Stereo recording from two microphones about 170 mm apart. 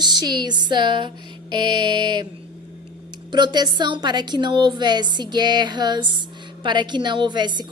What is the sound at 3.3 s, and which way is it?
A woman's voice, 25° right (ahead or behind).